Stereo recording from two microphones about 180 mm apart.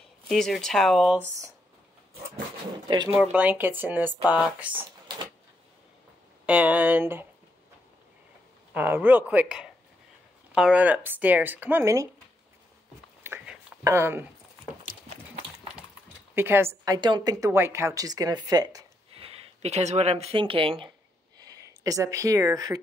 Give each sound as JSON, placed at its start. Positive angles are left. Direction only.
{"t": 0.3, "sound": "speech", "side_deg": 0}
{"t": 2.9, "sound": "a woman's voice", "side_deg": -25}
{"t": 3.2, "sound": "speech", "side_deg": -10}
{"t": 6.4, "sound": "speech", "side_deg": -10}
{"t": 8.7, "sound": "speech", "side_deg": -10}
{"t": 13.2, "sound": "whispering", "side_deg": -15}
{"t": 16.3, "sound": "a woman's voice", "side_deg": -10}
{"t": 19.1, "sound": "speech", "side_deg": -30}